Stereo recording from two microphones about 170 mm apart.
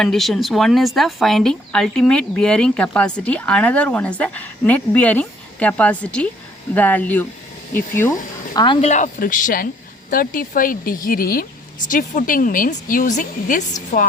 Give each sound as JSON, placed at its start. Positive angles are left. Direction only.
{"t": 0.0, "sound": "speech", "side_deg": 0}
{"t": 8.5, "sound": "speech", "side_deg": 30}
{"t": 8.8, "sound": "a woman's voice", "side_deg": 45}